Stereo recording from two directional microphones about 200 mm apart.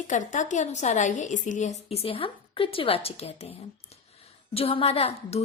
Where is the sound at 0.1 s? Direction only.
40° left (ahead or behind).